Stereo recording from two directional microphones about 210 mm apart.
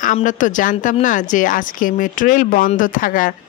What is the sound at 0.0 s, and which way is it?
A woman's voice, 35° left (ahead or behind).